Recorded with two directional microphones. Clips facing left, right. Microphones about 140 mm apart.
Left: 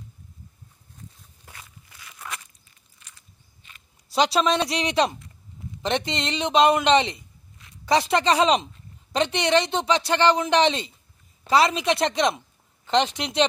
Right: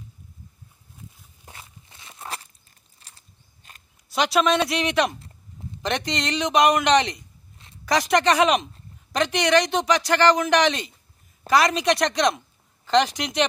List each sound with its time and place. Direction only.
1.4 s walk: 25° right (ahead or behind)
3.0 s biting: 35° right (ahead or behind)
4.1 s speech: 30° left (ahead or behind)